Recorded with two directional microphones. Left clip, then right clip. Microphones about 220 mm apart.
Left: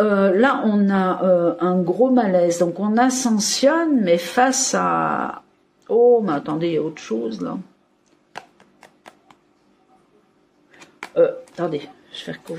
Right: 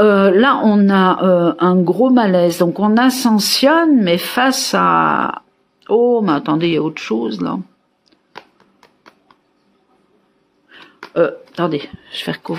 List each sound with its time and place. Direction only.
0.0 s speech: 40° right (ahead or behind)
11.1 s speech: 40° right (ahead or behind)